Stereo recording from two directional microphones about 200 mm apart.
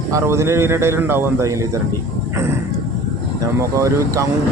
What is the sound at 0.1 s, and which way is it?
A man's voice, 15° right (ahead or behind).